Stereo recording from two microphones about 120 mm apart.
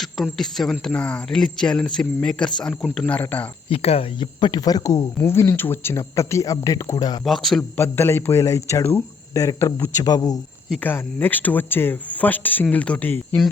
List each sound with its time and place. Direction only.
0.0 s speech: centre (ahead or behind)
3.1 s speech: 15° left (ahead or behind)
3.7 s speech: 55° left (ahead or behind)
4.4 s speech: 40° left (ahead or behind)
7.3 s speech: centre (ahead or behind)
7.8 s speech: 20° left (ahead or behind)
10.8 s speech: 15° left (ahead or behind)